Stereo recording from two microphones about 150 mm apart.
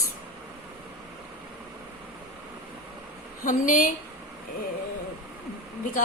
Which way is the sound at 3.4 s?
60° left (ahead or behind).